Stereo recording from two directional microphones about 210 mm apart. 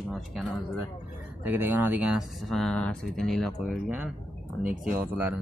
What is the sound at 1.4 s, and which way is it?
Speech, 10° right (ahead or behind).